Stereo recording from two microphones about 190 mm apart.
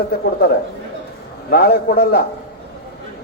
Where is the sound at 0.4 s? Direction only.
55° left (ahead or behind).